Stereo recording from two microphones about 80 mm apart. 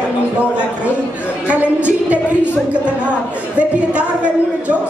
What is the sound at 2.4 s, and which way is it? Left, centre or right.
Speech, left.